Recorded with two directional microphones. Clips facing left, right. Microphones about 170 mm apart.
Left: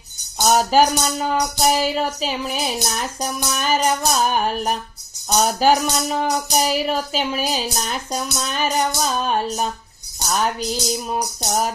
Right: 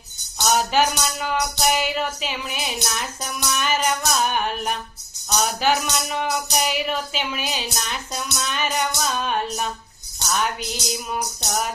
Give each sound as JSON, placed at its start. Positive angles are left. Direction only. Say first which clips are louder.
{"t": 0.3, "sound": "speech", "louder": "left 4 dB", "side_deg": 40}